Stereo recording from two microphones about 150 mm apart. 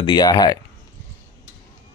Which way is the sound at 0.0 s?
30° left (ahead or behind).